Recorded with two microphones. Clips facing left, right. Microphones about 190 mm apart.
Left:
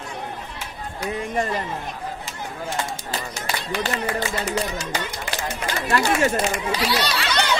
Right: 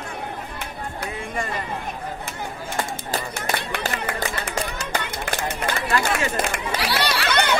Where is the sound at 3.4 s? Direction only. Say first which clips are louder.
Even; 60° right (ahead or behind).